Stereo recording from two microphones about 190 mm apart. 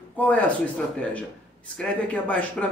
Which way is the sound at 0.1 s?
10° left (ahead or behind).